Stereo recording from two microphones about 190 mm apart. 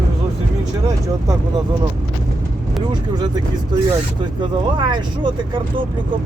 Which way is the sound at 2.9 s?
20° right (ahead or behind).